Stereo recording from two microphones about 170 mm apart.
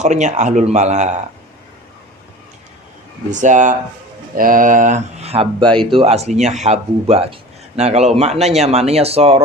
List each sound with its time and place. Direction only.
0.0 s speech: 45° right (ahead or behind)
3.2 s speech: 45° right (ahead or behind)